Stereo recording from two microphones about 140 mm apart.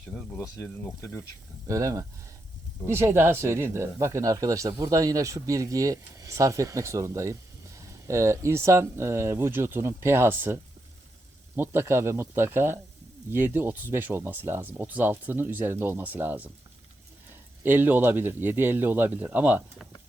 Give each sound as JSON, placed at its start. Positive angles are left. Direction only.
{"t": 0.1, "sound": "speech", "side_deg": 10}
{"t": 0.5, "sound": "speech", "side_deg": 20}
{"t": 1.6, "sound": "speech", "side_deg": -25}
{"t": 17.6, "sound": "speech", "side_deg": -15}